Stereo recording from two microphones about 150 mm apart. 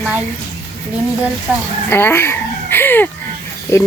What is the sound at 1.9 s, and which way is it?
Speech, 15° left (ahead or behind).